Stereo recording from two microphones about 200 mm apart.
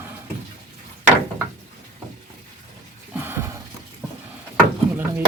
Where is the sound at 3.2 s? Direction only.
10° right (ahead or behind).